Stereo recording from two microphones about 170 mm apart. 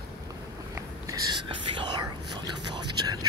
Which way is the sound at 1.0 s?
20° right (ahead or behind).